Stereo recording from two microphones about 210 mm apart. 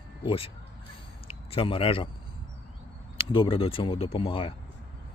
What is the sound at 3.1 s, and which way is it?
Speech, 25° left (ahead or behind).